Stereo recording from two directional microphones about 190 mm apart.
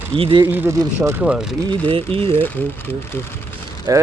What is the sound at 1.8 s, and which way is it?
Speech, 30° right (ahead or behind).